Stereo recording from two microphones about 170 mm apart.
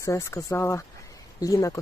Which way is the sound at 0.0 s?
15° left (ahead or behind).